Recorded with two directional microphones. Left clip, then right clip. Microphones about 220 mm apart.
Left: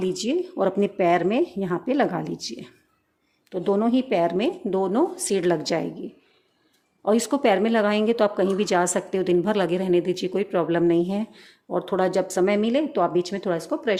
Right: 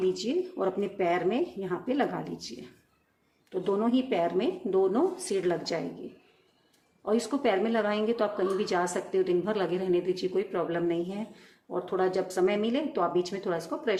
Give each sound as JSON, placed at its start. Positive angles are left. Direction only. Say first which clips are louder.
{"t": 0.0, "sound": "a woman's voice", "louder": "left 3 dB", "side_deg": 40}
{"t": 7.0, "sound": "a woman's voice", "louder": "left 7 dB", "side_deg": 45}